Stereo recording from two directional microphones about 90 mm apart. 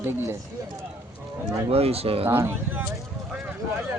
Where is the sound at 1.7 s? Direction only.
90° right.